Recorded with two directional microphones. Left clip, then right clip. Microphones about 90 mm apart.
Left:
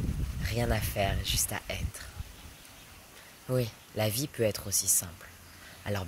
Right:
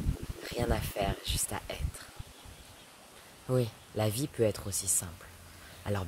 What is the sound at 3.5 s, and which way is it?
Speech, 35° right (ahead or behind).